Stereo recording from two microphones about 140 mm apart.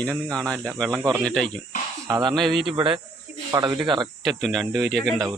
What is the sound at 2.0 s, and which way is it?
Speech, 30° right (ahead or behind).